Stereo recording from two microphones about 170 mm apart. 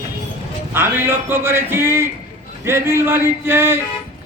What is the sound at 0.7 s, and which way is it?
A man's voice, 10° right (ahead or behind).